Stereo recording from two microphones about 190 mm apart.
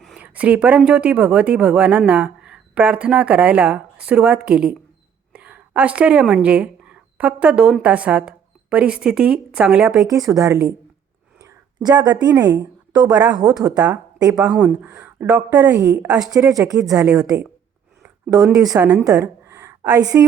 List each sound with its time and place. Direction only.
0.0 s speech: 5° right (ahead or behind)
10.2 s speech: 15° right (ahead or behind)
11.3 s a sound: 20° right (ahead or behind)
13.1 s speech: 20° right (ahead or behind)
13.7 s speech: 5° right (ahead or behind)
17.2 s speech: 15° right (ahead or behind)
18.4 s speech: 5° right (ahead or behind)